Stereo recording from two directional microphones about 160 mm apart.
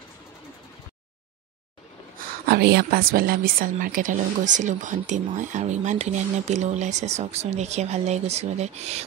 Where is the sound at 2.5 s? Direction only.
85° right.